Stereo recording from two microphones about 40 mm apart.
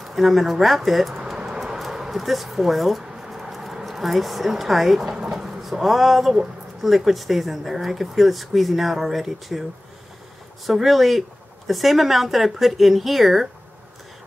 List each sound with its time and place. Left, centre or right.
0.0 s speech: centre
1.4 s vehicle: centre
1.8 s speech: centre
3.0 s a sound: centre
5.1 s speech: centre
10.7 s speech: centre